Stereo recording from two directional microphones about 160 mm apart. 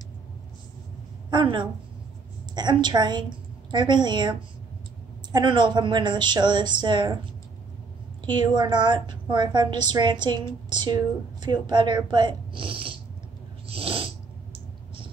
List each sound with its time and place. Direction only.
1.3 s a woman's voice: 30° right (ahead or behind)
8.5 s a woman's voice: 30° right (ahead or behind)
13.7 s snoring: 35° right (ahead or behind)